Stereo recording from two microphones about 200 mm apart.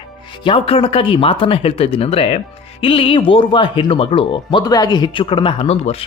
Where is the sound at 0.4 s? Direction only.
25° left (ahead or behind).